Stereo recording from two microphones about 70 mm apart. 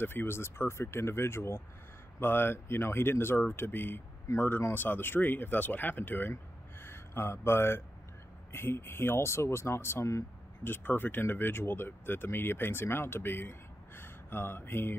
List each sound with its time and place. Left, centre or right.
0.0 s speech: left
6.3 s a sound: left
8.5 s speech: left
10.6 s speech: left